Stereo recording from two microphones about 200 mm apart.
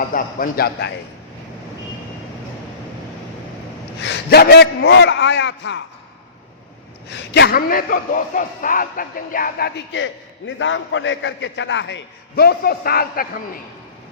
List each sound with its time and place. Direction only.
0.1 s a man's voice: 45° left (ahead or behind)
4.0 s a man's voice: 55° left (ahead or behind)
7.1 s a man's voice: 60° left (ahead or behind)